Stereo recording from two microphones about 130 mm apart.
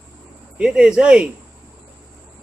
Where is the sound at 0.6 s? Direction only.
5° right (ahead or behind).